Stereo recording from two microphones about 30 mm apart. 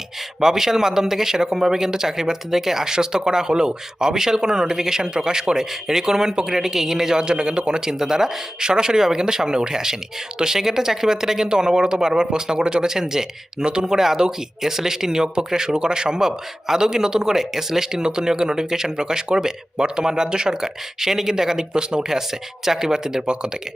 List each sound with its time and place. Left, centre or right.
0.3 s speech: centre
7.9 s speech: centre
8.6 s speech: right
18.0 s speech: right
23.2 s speech: right